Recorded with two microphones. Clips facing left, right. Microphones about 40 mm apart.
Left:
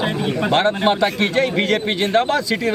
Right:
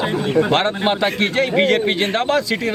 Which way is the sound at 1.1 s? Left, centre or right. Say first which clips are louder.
Right 1 dB; centre.